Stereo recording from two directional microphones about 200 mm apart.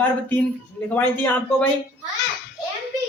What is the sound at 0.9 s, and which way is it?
Speech, 10° left (ahead or behind).